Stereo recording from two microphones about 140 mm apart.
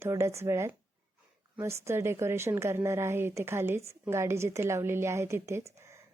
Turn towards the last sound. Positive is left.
turn(degrees=-20)  # may be behind; listen again after turning